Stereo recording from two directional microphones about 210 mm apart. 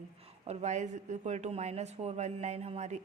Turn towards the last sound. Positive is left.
turn(degrees=-35)  # may be behind; listen again after turning